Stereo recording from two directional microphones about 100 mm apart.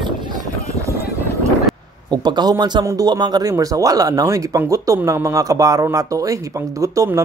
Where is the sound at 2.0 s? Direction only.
45° right (ahead or behind).